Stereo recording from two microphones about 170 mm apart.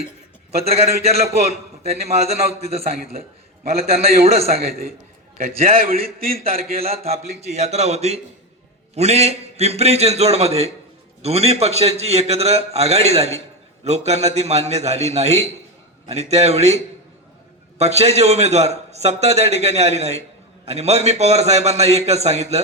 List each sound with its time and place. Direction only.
0.5 s a man's voice: 35° right (ahead or behind)
3.2 s a man's voice: 65° right (ahead or behind)
3.8 s a man's voice: 35° right (ahead or behind)
5.9 s a man's voice: 60° right (ahead or behind)
6.3 s a man's voice: 35° right (ahead or behind)